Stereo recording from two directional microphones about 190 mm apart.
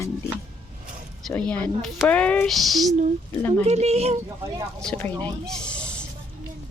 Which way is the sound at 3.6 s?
35° right (ahead or behind).